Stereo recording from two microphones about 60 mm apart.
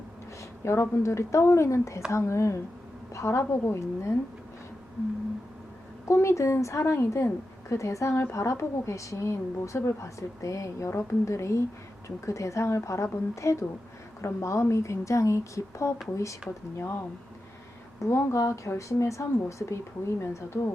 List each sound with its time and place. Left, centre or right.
0.6 s a woman's voice: left
6.1 s a woman's voice: left
18.0 s speech: left